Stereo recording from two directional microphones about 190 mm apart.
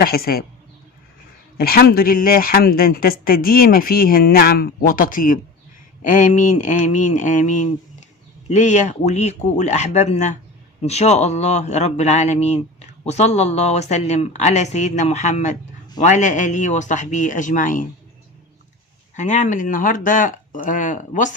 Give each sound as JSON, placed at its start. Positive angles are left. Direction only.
{"t": 0.0, "sound": "speech", "side_deg": 55}
{"t": 1.5, "sound": "speech", "side_deg": 55}
{"t": 19.1, "sound": "speech", "side_deg": 40}